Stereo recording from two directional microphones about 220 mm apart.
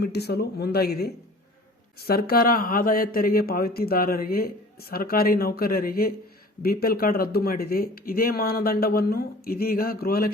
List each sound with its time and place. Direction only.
0.0 s speech: 45° left (ahead or behind)